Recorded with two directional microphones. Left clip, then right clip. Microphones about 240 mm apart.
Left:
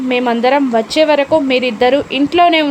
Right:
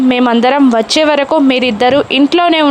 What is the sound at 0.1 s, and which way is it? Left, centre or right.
A woman's voice, centre.